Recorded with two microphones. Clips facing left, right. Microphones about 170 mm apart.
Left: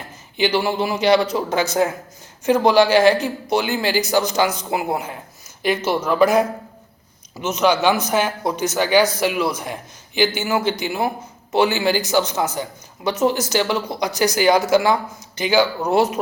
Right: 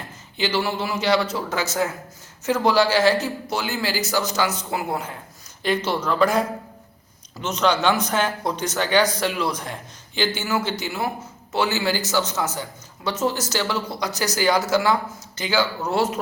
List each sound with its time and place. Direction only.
0.3 s a man's voice: 15° left (ahead or behind)
7.4 s a man's voice: 10° left (ahead or behind)